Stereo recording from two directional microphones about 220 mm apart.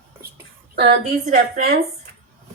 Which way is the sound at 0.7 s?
45° right (ahead or behind).